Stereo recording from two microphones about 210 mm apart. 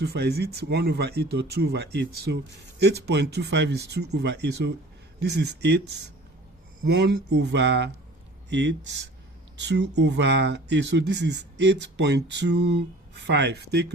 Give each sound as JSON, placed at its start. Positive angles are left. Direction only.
{"t": 0.0, "sound": "speech", "side_deg": -50}